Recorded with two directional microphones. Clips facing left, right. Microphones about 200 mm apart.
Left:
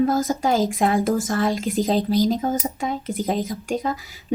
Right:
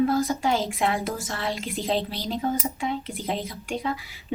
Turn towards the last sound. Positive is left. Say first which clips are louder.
# left 4 dB
turn(degrees=45)  # may be behind; listen again after turning